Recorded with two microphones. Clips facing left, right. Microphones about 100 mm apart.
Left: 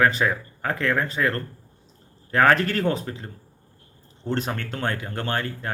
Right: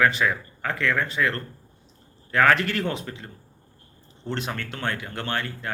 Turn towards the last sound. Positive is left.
turn(degrees=40)  # may be behind; listen again after turning